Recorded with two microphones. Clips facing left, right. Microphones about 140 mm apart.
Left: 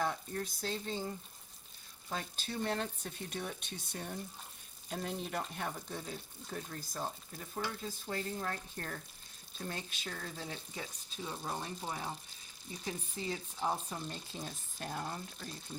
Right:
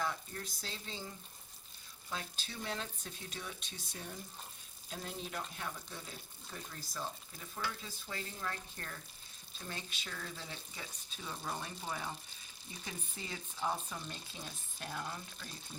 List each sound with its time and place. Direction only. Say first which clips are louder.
0.0 s speech: left 4 dB; 55° left (ahead or behind)
11.2 s speech: left 2 dB; 30° left (ahead or behind)
13.3 s speech: left 1 dB; 25° left (ahead or behind)